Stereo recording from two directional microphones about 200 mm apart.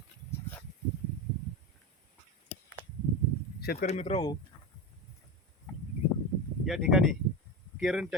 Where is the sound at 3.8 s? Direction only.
35° left (ahead or behind).